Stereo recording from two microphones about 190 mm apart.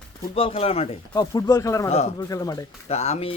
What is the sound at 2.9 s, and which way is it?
Speech, 35° left (ahead or behind).